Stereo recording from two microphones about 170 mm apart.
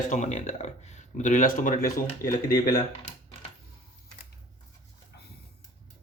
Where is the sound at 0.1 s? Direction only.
45° left (ahead or behind); by 2.7 s 60° left (ahead or behind).